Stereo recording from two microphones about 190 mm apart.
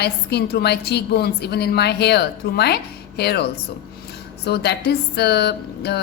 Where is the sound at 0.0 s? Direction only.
60° left (ahead or behind).